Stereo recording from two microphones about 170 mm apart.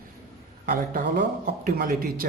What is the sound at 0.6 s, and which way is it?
Speech, 55° right (ahead or behind).